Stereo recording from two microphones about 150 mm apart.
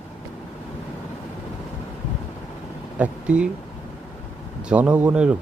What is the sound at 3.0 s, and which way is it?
Speech, 10° right (ahead or behind).